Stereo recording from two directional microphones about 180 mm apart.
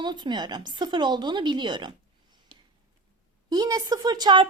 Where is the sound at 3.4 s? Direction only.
20° right (ahead or behind).